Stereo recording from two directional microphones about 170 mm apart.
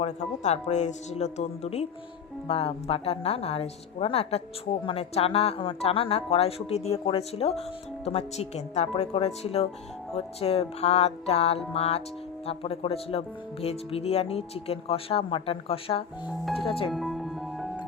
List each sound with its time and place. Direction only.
0.0 s speech: 40° left (ahead or behind)
16.2 s speech: centre (ahead or behind)
16.6 s speech: 30° left (ahead or behind)
16.9 s music: centre (ahead or behind)